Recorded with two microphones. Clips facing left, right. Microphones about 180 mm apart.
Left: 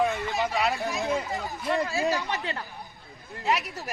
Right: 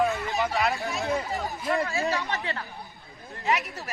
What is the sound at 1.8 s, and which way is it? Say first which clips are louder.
Speech: left 1 dB; 10° left (ahead or behind).